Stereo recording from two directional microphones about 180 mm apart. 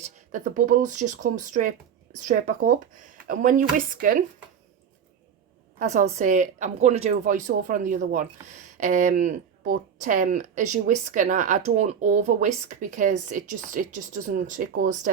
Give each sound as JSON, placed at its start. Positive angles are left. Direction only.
{"t": 0.0, "sound": "speech", "side_deg": -45}
{"t": 5.8, "sound": "speech", "side_deg": -40}